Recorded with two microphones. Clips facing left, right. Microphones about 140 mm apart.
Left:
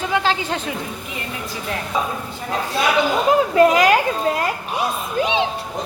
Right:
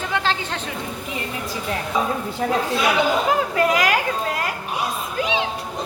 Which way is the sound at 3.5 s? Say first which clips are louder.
Left 8 dB; 25° left (ahead or behind).